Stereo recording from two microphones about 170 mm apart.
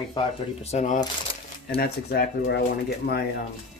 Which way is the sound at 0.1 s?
40° left (ahead or behind).